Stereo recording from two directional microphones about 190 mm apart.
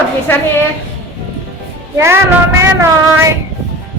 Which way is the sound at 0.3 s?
10° left (ahead or behind).